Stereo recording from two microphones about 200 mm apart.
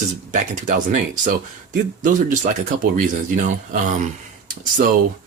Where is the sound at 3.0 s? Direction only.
40° right (ahead or behind).